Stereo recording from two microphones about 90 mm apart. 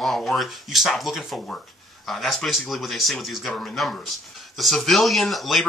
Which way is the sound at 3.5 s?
10° left (ahead or behind).